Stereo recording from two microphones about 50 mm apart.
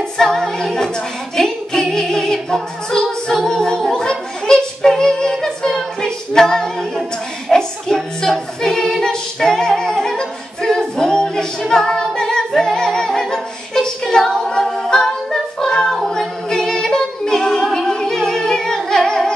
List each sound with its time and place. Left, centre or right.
0.2 s a capella: centre
1.3 s music: centre
11.0 s a capella: centre